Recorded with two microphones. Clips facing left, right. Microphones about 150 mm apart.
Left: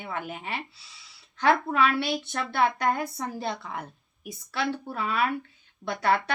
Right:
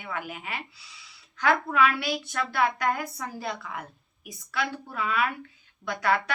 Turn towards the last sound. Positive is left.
turn(degrees=30)  # may be behind; listen again after turning